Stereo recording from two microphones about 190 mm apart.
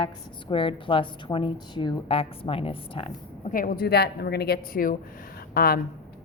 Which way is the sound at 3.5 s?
50° left (ahead or behind).